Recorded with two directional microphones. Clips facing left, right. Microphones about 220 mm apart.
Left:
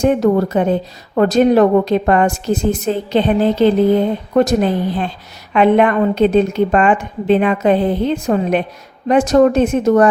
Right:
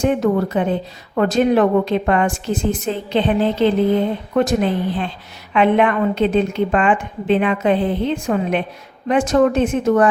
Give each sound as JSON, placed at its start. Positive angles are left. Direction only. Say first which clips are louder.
{"t": 0.0, "sound": "a woman's voice", "louder": "left 4 dB", "side_deg": 40}